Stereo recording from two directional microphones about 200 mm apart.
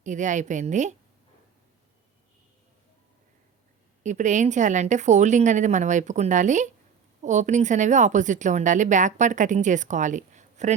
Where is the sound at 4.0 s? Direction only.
35° right (ahead or behind).